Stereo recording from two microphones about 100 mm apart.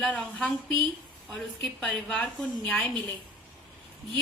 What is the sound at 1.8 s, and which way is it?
Speech, 10° left (ahead or behind).